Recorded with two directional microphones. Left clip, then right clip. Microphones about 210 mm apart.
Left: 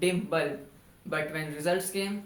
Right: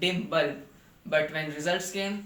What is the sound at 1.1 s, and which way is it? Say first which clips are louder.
Speech: right 5 dB; 15° left (ahead or behind).